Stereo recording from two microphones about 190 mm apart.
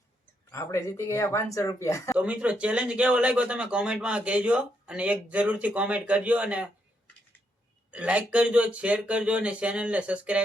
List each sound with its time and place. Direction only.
0.5 s speech: 15° left (ahead or behind)
2.1 s speech: 5° right (ahead or behind)
7.9 s speech: 5° right (ahead or behind)